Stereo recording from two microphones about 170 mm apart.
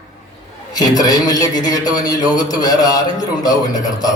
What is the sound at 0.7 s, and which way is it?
A man's voice, 20° left (ahead or behind).